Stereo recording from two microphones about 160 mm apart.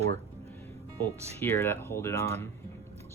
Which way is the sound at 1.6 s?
15° left (ahead or behind).